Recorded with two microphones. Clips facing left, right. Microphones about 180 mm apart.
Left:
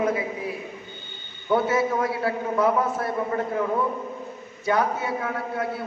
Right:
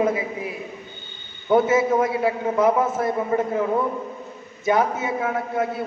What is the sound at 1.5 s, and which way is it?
A man's voice, 20° right (ahead or behind).